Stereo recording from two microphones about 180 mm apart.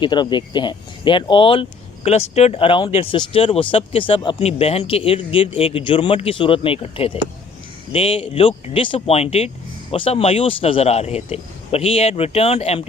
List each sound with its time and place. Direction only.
0.0 s speech: 25° left (ahead or behind)